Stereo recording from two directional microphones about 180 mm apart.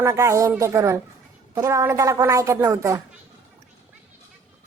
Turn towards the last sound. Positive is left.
turn(degrees=-15)  # may be behind; listen again after turning